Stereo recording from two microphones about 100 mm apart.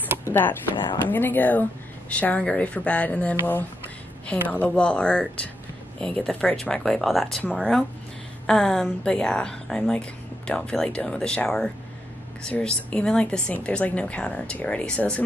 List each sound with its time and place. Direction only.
0.2 s a woman's voice: 20° left (ahead or behind)